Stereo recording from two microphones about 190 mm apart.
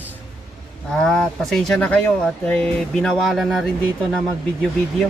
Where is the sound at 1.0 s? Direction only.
5° left (ahead or behind).